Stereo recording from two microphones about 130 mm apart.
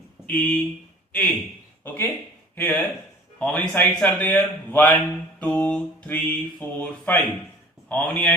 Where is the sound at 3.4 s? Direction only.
5° left (ahead or behind).